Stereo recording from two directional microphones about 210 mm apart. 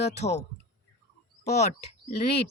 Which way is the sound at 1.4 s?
30° left (ahead or behind).